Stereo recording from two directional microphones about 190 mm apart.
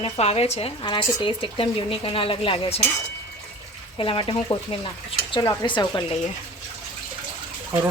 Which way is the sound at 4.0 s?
25° left (ahead or behind).